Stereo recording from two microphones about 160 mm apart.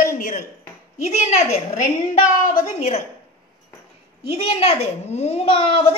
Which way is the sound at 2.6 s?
50° left (ahead or behind).